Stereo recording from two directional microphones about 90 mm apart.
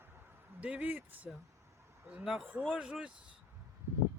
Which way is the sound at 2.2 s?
5° right (ahead or behind).